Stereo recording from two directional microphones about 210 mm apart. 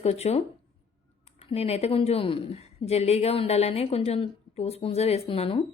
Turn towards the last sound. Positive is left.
turn(degrees=25)  # may be behind; listen again after turning